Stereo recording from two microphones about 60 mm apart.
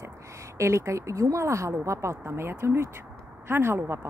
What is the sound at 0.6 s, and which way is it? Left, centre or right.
A woman's voice, right.